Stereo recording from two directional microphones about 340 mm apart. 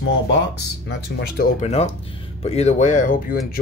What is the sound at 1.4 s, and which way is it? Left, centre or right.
Speech, centre.